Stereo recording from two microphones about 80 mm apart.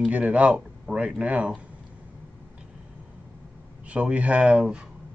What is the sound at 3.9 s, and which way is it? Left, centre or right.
Speech, centre.